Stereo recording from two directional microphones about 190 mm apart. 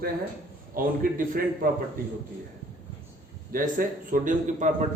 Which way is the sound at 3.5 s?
45° right (ahead or behind).